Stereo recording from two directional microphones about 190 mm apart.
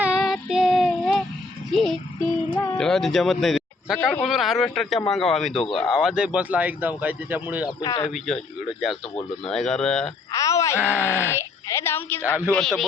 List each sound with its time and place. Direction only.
0.0 s child singing: 5° right (ahead or behind)
1.7 s music: centre (ahead or behind)
2.6 s speech: centre (ahead or behind)
7.8 s speech: 25° left (ahead or behind)
8.0 s speech: 5° left (ahead or behind)
9.5 s speech: 5° left (ahead or behind)
10.3 s groan: 15° left (ahead or behind)
10.8 s speech: 10° right (ahead or behind)
11.3 s a woman's voice: 15° left (ahead or behind)